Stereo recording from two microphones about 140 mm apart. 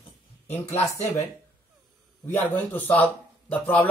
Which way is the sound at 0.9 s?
15° left (ahead or behind).